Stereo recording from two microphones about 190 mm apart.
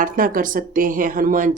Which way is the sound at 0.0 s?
45° right (ahead or behind).